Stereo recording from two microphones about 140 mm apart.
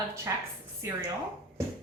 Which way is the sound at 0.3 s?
20° right (ahead or behind).